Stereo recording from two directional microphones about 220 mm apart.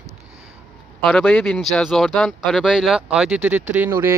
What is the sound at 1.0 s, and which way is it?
Speech, 5° left (ahead or behind).